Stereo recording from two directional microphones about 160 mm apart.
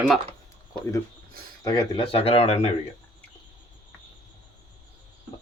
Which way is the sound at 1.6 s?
25° left (ahead or behind).